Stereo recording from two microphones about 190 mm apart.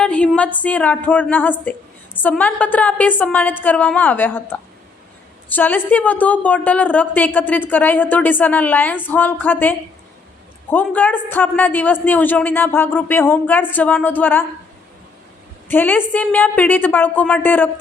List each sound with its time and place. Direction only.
0.0 s a sound: 5° left (ahead or behind)
0.6 s speech: 10° left (ahead or behind)
15.7 s speech: 10° left (ahead or behind)